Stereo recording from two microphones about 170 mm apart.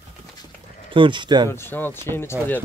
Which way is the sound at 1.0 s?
30° right (ahead or behind).